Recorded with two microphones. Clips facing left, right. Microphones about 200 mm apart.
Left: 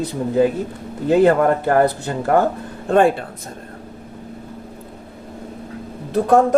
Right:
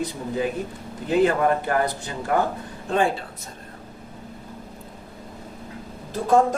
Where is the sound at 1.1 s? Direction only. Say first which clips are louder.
Left 6 dB; 60° left (ahead or behind).